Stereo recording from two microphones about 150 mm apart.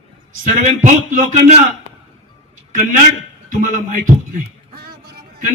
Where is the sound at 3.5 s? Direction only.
65° right (ahead or behind).